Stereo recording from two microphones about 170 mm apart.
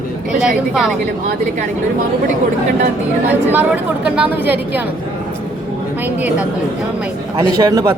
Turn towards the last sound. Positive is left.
turn(degrees=-20)  # may be behind; listen again after turning